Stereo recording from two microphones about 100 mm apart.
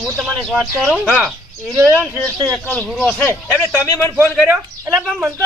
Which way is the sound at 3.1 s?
15° left (ahead or behind).